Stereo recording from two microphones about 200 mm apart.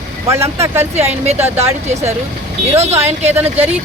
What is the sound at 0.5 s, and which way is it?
Speech, 10° right (ahead or behind).